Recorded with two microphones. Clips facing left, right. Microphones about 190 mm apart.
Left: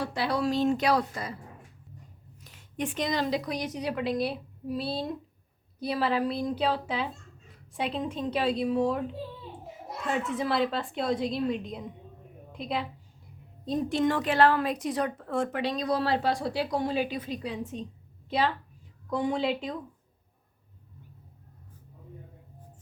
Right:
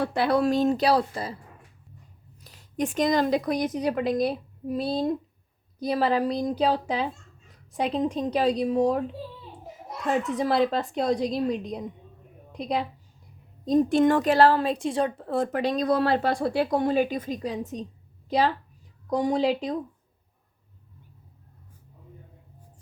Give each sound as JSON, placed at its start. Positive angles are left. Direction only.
{"t": 0.0, "sound": "a woman's voice", "side_deg": -55}
{"t": 2.4, "sound": "a woman's voice", "side_deg": -35}
{"t": 10.1, "sound": "a woman's voice", "side_deg": -40}